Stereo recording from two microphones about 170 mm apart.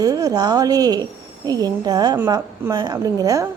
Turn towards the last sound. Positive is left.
turn(degrees=-20)  # may be behind; listen again after turning